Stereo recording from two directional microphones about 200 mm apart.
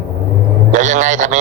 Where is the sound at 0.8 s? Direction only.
40° right (ahead or behind).